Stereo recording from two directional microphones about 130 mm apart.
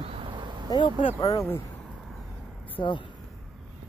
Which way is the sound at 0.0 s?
45° right (ahead or behind).